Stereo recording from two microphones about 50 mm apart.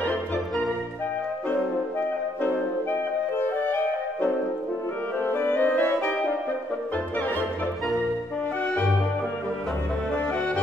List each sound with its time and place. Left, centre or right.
2.4 s music: left
5.2 s music: left